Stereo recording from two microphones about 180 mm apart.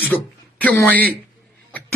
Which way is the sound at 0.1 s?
10° left (ahead or behind).